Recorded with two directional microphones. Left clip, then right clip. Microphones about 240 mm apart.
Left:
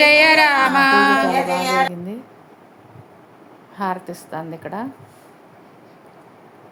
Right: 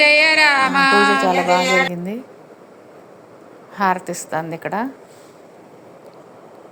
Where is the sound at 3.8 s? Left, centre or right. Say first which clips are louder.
Right 6 dB; centre.